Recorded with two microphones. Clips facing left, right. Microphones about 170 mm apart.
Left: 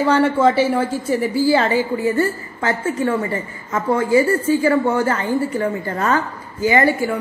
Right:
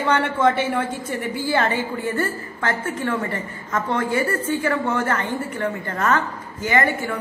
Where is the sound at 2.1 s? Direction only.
25° left (ahead or behind).